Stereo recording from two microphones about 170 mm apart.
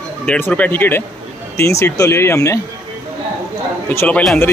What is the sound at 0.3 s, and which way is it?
Speech, 10° left (ahead or behind).